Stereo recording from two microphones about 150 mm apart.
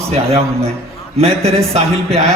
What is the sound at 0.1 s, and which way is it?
A man's voice, 40° right (ahead or behind).